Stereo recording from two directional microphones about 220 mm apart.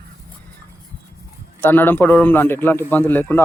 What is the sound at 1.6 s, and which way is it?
Speech, 10° left (ahead or behind).